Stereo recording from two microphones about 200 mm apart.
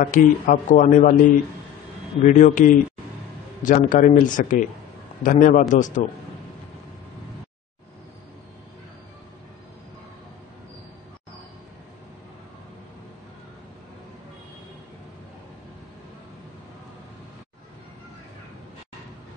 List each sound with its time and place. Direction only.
0.0 s a man's voice: 40° left (ahead or behind)